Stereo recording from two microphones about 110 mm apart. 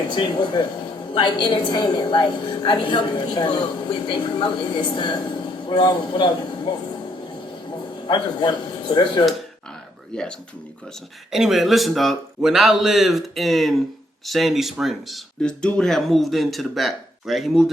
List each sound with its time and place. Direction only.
0.1 s a woman's voice: 50° left (ahead or behind)
8.0 s speech: 45° left (ahead or behind)
11.3 s speech: 5° right (ahead or behind)